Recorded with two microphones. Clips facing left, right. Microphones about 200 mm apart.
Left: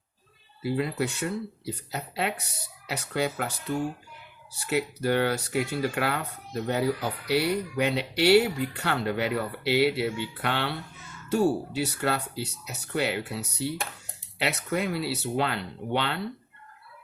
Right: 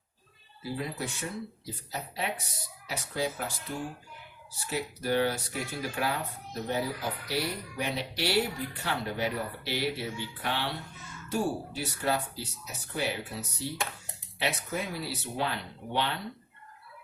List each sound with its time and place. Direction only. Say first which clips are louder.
0.6 s speech: left 7 dB; 70° left (ahead or behind)
4.6 s speech: left 6 dB; 65° left (ahead or behind)